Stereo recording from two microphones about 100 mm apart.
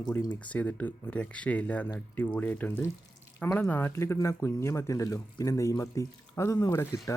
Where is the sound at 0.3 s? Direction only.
15° left (ahead or behind).